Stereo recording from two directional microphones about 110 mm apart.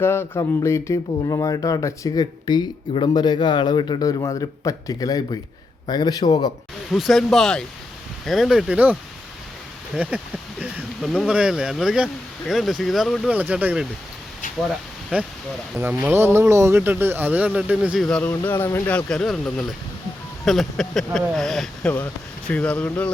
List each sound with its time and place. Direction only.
0.0 s a man's voice: 20° left (ahead or behind); by 4.1 s 40° left (ahead or behind)
4.2 s speech: 30° left (ahead or behind)
6.9 s speech: centre (ahead or behind)
11.0 s speech: centre (ahead or behind)
13.3 s speech: 15° right (ahead or behind)
15.1 s speech: 10° right (ahead or behind)
18.2 s speech: 15° left (ahead or behind)
21.9 s speech: 15° left (ahead or behind)